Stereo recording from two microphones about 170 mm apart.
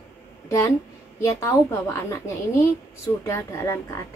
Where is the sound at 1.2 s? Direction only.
20° left (ahead or behind).